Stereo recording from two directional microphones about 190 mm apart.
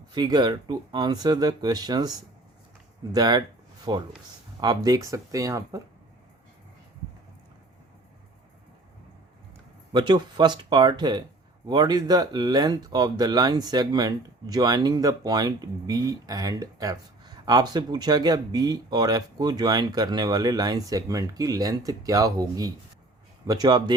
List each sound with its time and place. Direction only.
0.1 s speech: 20° right (ahead or behind)
9.9 s speech: 25° right (ahead or behind)